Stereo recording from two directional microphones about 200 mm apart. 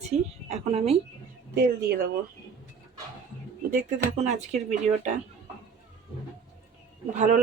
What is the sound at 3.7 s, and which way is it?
Speech, 40° right (ahead or behind).